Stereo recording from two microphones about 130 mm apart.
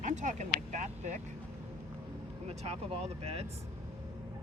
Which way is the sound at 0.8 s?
70° right (ahead or behind).